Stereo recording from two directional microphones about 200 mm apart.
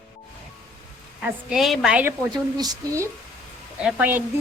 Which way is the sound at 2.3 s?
20° right (ahead or behind).